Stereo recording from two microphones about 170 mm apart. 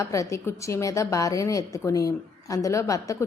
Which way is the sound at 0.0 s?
15° left (ahead or behind).